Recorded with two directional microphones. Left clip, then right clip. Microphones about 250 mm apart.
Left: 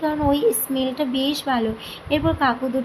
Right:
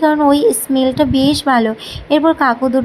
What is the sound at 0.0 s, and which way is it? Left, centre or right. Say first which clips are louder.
Speech: right 8 dB; right.